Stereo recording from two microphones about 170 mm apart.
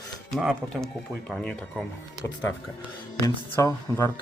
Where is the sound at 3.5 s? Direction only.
15° left (ahead or behind).